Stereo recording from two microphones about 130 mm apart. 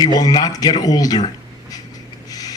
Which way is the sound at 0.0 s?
30° left (ahead or behind).